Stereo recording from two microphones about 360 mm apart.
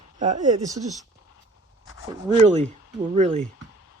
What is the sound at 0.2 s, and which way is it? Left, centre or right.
Speech, centre.